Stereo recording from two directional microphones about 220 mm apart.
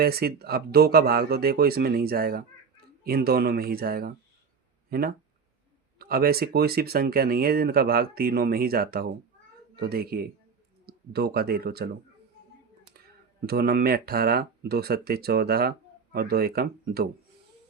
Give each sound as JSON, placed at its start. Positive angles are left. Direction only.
{"t": 0.0, "sound": "speech", "side_deg": -45}
{"t": 13.4, "sound": "speech", "side_deg": -45}